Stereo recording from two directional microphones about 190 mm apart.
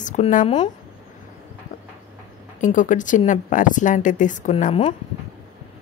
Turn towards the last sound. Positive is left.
turn(degrees=30)  # may be behind; listen again after turning